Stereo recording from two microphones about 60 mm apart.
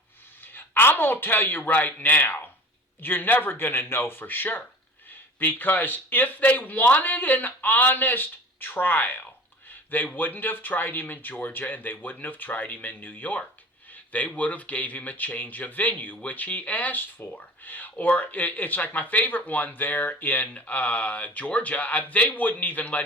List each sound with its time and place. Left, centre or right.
0.5 s speech: left